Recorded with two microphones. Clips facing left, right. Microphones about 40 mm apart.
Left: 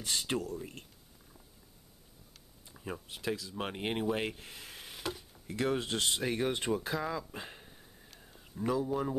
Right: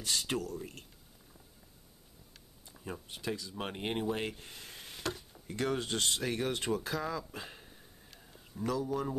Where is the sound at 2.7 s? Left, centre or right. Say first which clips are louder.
Left 2 dB; centre.